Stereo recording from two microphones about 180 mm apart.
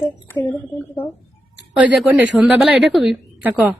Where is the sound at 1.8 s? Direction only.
10° right (ahead or behind).